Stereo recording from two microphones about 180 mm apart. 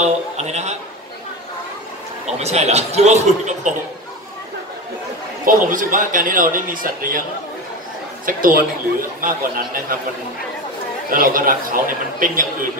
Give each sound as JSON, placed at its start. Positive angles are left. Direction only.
{"t": 0.0, "sound": "speech", "side_deg": -40}
{"t": 2.3, "sound": "speech", "side_deg": -35}
{"t": 5.4, "sound": "speech", "side_deg": -50}
{"t": 8.3, "sound": "speech", "side_deg": -50}
{"t": 11.1, "sound": "speech", "side_deg": -50}